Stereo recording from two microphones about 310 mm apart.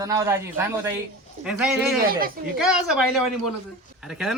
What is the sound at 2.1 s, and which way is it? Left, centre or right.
Speech, right.